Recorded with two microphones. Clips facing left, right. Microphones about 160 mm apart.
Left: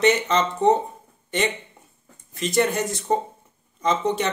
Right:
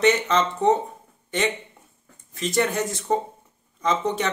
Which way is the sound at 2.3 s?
5° left (ahead or behind).